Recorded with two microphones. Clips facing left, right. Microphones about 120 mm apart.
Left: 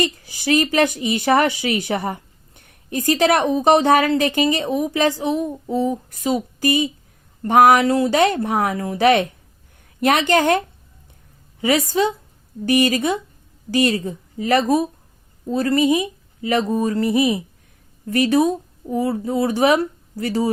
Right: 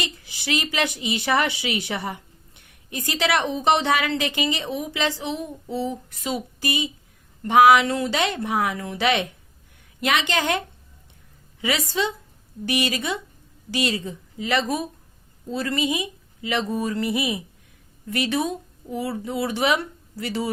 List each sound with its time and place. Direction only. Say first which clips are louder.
0.0 s a woman's voice: left 10 dB; 45° left (ahead or behind)
11.6 s a woman's voice: left 7 dB; 45° left (ahead or behind)